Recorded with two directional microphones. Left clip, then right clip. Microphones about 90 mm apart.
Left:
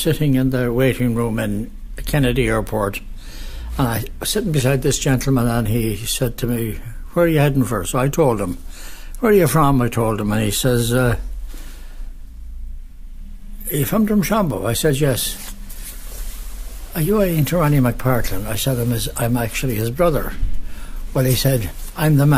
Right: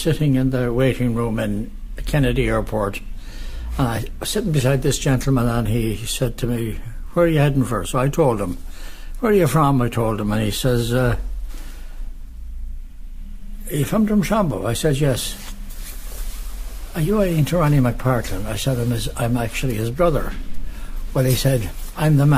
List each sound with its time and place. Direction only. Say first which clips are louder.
0.0 s speech: left 2 dB; 40° left (ahead or behind)
13.7 s speech: left 1 dB; 35° left (ahead or behind)
16.9 s speech: left 2 dB; 35° left (ahead or behind)